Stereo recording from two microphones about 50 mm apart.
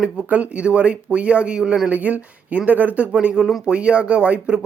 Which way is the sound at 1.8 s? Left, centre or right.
Right.